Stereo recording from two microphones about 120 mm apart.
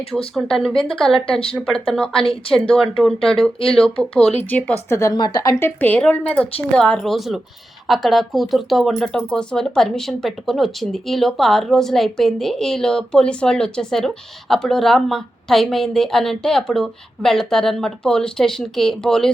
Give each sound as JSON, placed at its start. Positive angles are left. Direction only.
{"t": 0.3, "sound": "speech", "side_deg": 5}
{"t": 5.1, "sound": "a woman's voice", "side_deg": 35}
{"t": 5.5, "sound": "speech", "side_deg": 15}